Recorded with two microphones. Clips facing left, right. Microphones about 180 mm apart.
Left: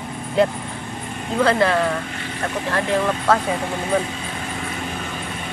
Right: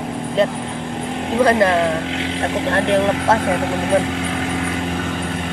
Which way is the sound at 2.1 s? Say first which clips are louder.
Right 6 dB; 70° right (ahead or behind).